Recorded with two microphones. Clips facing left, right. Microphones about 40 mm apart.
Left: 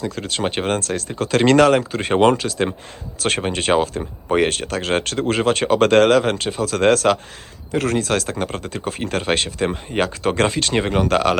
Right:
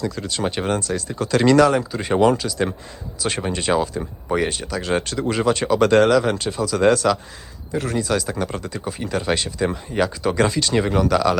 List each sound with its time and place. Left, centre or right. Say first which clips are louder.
0.2 s speech: left 2 dB; left
3.2 s speech: left 3 dB; left
7.7 s speech: left 2 dB; left